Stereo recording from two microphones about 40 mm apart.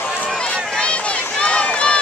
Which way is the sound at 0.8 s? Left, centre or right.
Left.